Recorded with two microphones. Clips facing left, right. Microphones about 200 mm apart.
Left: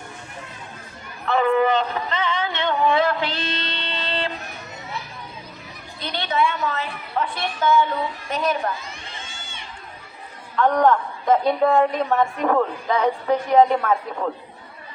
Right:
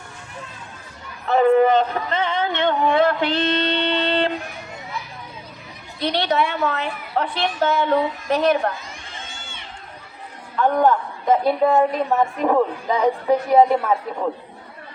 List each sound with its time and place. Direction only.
1.3 s a sound: 40° right (ahead or behind); by 4.3 s 60° right (ahead or behind)
6.0 s a woman's voice: 65° right (ahead or behind)
10.8 s a man's voice: 5° right (ahead or behind)